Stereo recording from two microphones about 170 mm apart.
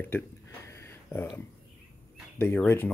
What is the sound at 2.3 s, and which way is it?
Speech, 10° left (ahead or behind).